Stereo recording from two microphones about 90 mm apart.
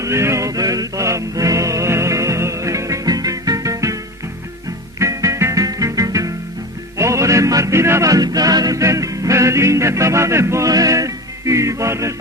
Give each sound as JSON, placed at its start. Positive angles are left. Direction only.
{"t": 0.0, "sound": "music", "side_deg": -30}
{"t": 4.9, "sound": "music", "side_deg": -35}